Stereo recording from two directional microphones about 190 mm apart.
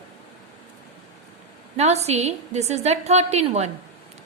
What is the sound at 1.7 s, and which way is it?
A woman's voice, 35° right (ahead or behind).